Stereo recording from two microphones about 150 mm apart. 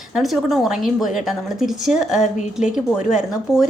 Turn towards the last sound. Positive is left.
turn(degrees=-5)  # may be behind; listen again after turning